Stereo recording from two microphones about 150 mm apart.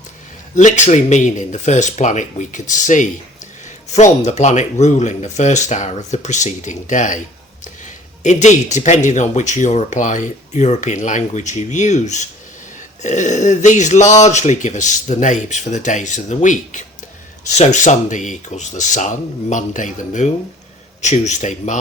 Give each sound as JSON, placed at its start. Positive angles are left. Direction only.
{"t": 0.5, "sound": "speech", "side_deg": 55}